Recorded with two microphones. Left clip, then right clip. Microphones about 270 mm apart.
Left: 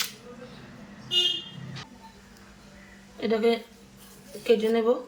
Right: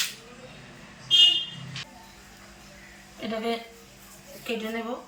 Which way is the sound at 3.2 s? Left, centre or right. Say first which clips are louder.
Left 7 dB; centre.